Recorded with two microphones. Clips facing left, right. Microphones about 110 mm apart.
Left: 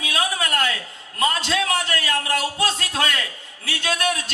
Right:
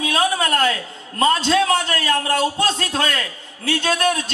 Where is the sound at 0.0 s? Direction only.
35° right (ahead or behind).